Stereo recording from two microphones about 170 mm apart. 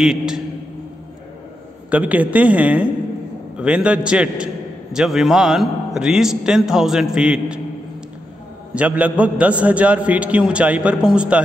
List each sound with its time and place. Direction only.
0.0 s a man's voice: 5° right (ahead or behind)
1.9 s a man's voice: 10° right (ahead or behind)
8.7 s a man's voice: 10° right (ahead or behind)